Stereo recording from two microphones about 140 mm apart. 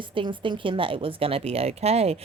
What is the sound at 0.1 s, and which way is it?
Speech, 35° right (ahead or behind).